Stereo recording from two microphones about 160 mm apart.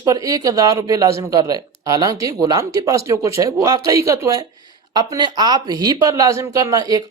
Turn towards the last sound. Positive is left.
turn(degrees=-20)  # may be behind; listen again after turning